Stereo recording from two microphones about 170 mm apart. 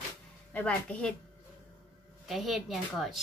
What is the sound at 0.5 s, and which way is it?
Speech, 10° left (ahead or behind).